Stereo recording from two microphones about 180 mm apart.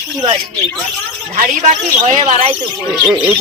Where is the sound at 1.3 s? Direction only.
45° right (ahead or behind).